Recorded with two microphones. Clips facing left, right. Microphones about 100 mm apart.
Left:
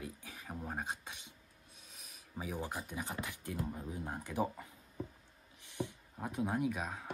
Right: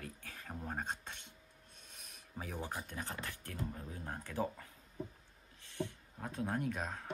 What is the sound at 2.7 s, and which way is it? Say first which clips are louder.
Speech: left 2 dB; 10° left (ahead or behind).